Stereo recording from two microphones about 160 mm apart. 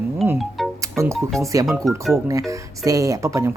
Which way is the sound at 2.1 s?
20° right (ahead or behind).